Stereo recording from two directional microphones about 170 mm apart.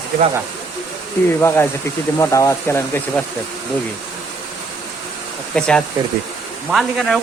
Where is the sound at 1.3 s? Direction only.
15° left (ahead or behind).